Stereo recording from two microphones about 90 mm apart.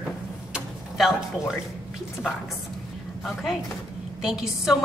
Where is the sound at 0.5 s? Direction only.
Centre (ahead or behind).